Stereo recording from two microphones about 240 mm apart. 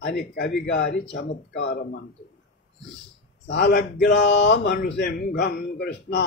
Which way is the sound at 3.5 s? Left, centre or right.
Left.